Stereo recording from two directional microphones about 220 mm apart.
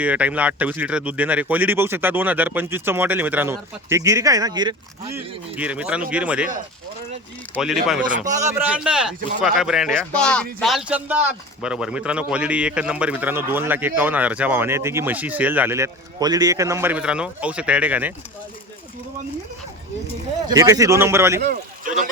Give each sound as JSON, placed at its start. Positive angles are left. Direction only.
{"t": 0.0, "sound": "a man's voice", "side_deg": -5}
{"t": 5.1, "sound": "speech", "side_deg": -5}
{"t": 7.5, "sound": "speech", "side_deg": 0}
{"t": 8.2, "sound": "a man's voice", "side_deg": -35}
{"t": 8.4, "sound": "a man's voice", "side_deg": -5}
{"t": 20.5, "sound": "a man's voice", "side_deg": -15}
{"t": 21.4, "sound": "speech", "side_deg": -40}